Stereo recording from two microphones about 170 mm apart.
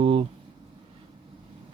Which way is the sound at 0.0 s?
30° right (ahead or behind).